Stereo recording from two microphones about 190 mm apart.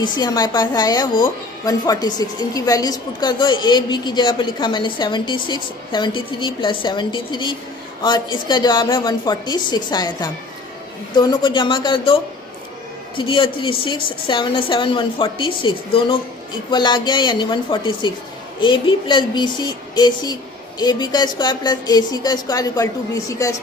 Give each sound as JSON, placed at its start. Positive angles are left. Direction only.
{"t": 0.0, "sound": "a woman's voice", "side_deg": 20}